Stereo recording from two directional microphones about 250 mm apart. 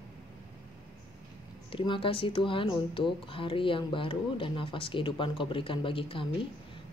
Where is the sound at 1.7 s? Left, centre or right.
Left.